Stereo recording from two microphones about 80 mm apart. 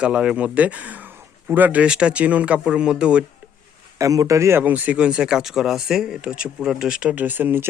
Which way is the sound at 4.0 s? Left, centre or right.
Right.